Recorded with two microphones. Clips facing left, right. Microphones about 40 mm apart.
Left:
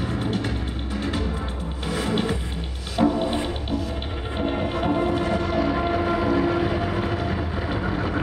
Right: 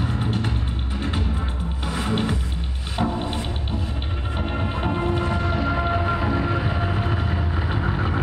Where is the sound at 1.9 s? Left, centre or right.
Centre.